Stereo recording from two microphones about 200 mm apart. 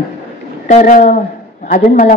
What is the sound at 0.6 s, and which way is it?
A man's voice, 35° left (ahead or behind).